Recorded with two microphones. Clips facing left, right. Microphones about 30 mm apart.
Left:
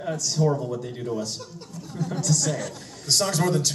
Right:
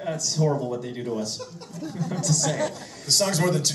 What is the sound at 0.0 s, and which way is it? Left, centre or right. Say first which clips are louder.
A man's voice: left 1 dB; centre.